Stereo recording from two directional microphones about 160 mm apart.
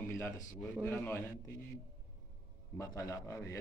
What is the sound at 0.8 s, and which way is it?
Speech, 10° left (ahead or behind).